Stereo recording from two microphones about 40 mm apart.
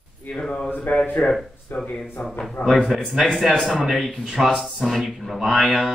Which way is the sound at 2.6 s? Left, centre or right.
Centre.